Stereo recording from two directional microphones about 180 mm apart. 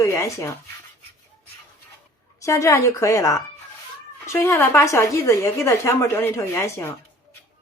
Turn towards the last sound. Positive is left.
turn(degrees=15)  # may be behind; listen again after turning